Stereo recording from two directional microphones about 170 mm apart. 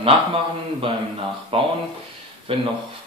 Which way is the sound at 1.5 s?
35° right (ahead or behind).